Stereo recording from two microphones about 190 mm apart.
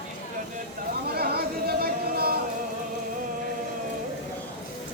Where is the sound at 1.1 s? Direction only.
55° right (ahead or behind).